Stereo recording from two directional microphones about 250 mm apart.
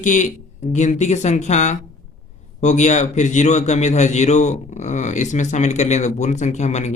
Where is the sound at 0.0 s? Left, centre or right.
Left.